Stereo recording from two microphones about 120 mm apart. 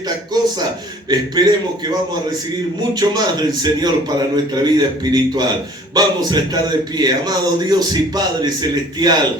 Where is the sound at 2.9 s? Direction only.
35° right (ahead or behind).